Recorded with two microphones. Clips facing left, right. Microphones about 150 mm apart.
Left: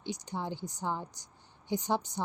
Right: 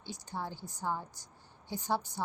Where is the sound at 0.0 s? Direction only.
20° left (ahead or behind).